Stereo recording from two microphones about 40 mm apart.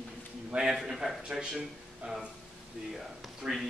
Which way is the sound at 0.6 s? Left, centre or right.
Centre.